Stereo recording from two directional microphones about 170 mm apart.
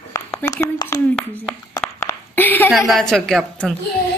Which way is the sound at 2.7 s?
Centre (ahead or behind).